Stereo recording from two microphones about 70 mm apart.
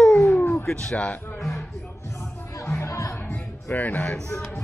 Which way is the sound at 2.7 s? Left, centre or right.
Left.